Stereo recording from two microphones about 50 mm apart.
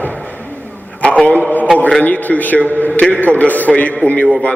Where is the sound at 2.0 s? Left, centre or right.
Left.